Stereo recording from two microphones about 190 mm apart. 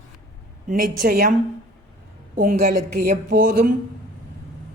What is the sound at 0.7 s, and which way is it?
Speech, 50° right (ahead or behind).